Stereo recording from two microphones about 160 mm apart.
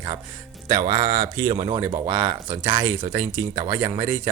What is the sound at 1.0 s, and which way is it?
Speech, 40° right (ahead or behind).